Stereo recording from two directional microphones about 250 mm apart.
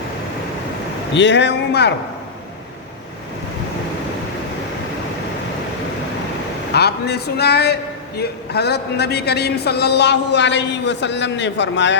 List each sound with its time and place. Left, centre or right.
1.1 s a man's voice: left
6.7 s a man's voice: left